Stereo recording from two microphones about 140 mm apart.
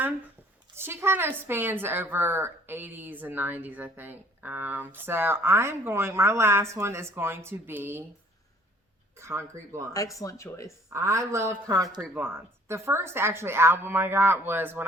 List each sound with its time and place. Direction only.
0.8 s a woman's voice: 15° right (ahead or behind)
9.1 s a woman's voice: 20° right (ahead or behind)
9.9 s speech: 25° left (ahead or behind)
10.9 s a woman's voice: 20° right (ahead or behind)